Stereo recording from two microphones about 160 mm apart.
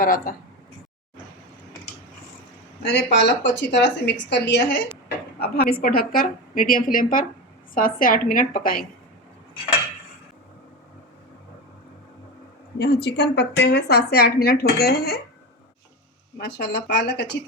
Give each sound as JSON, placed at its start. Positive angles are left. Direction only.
{"t": 0.0, "sound": "a woman's voice", "side_deg": 60}
{"t": 2.9, "sound": "a woman's voice", "side_deg": 90}
{"t": 5.4, "sound": "a woman's voice", "side_deg": 75}
{"t": 12.8, "sound": "a woman's voice", "side_deg": 90}
{"t": 16.4, "sound": "a woman's voice", "side_deg": 85}